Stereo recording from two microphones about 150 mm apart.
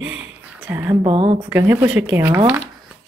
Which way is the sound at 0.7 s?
15° right (ahead or behind).